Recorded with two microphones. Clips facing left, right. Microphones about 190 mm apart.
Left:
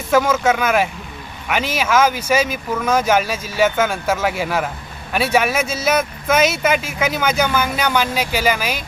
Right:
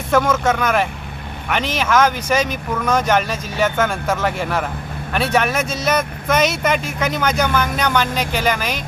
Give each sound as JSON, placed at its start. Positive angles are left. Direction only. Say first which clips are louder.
{"t": 0.1, "sound": "speech", "louder": "left 1 dB", "side_deg": 5}